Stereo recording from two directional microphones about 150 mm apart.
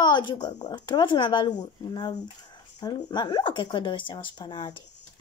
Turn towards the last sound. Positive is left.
turn(degrees=30)  # may be behind; listen again after turning